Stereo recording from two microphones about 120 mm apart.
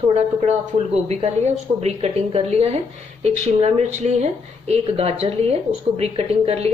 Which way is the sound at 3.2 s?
70° right (ahead or behind).